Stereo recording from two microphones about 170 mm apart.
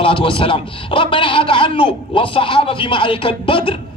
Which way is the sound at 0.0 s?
30° left (ahead or behind).